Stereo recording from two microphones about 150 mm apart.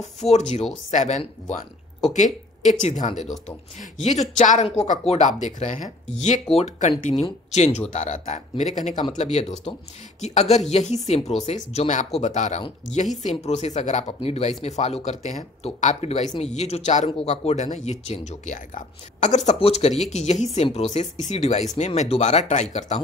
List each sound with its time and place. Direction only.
0.0 s a woman's voice: 50° left (ahead or behind)
6.5 s speech: 45° left (ahead or behind)